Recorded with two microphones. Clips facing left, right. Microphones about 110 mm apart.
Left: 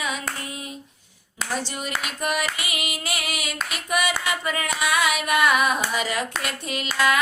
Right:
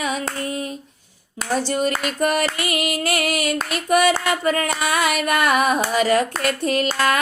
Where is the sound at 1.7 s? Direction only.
45° right (ahead or behind).